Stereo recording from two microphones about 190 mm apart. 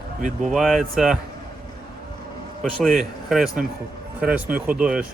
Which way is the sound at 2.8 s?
Centre (ahead or behind).